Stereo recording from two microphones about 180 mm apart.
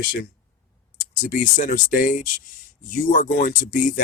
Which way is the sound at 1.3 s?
45° left (ahead or behind).